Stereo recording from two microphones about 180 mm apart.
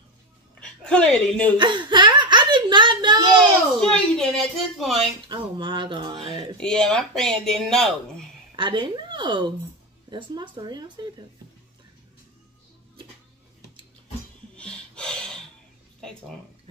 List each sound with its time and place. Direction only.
0.6 s speech: 5° left (ahead or behind)
1.6 s a child's voice: 25° right (ahead or behind)
3.8 s speech: 5° left (ahead or behind)
5.3 s speech: 25° right (ahead or behind)
6.6 s speech: 5° left (ahead or behind)
8.5 s speech: 25° right (ahead or behind)
14.6 s a sound: 5° left (ahead or behind)